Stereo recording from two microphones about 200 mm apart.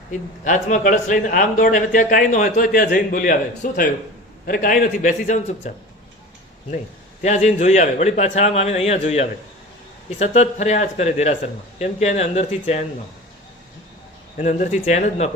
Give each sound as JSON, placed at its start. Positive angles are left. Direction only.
{"t": 0.1, "sound": "a man's voice", "side_deg": 40}
{"t": 7.2, "sound": "speech", "side_deg": 35}
{"t": 14.3, "sound": "speech", "side_deg": 40}